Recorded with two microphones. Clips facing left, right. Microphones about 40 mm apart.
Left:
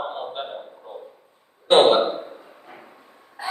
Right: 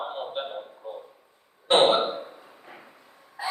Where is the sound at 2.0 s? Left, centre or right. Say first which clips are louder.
Left 4 dB; centre.